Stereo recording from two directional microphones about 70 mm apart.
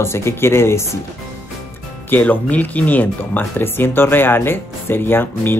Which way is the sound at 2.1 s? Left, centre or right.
Left.